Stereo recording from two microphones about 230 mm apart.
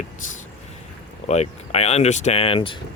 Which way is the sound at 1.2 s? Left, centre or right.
Left.